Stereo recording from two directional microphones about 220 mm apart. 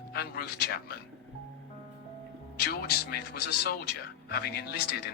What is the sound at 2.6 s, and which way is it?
Speech, 45° left (ahead or behind).